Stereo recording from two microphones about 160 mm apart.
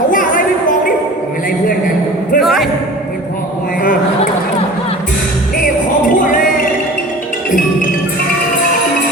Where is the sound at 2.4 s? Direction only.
Centre (ahead or behind).